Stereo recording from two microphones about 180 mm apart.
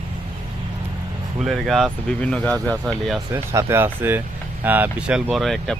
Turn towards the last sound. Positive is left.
turn(degrees=0)  # may be behind; listen again after turning